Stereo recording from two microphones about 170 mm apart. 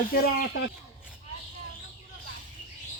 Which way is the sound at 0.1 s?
60° left (ahead or behind).